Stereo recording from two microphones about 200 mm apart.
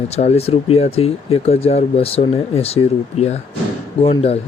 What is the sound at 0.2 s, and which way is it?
Speech, 30° left (ahead or behind).